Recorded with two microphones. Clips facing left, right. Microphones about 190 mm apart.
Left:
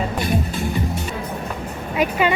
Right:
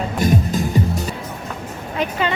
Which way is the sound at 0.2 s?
45° right (ahead or behind).